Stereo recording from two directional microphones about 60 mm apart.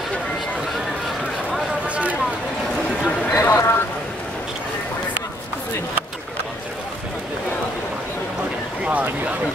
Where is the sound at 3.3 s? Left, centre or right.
Left.